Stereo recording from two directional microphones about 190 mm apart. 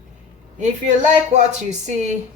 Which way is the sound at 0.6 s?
40° right (ahead or behind).